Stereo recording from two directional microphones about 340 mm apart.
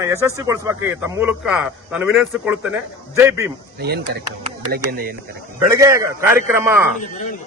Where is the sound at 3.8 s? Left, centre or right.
Right.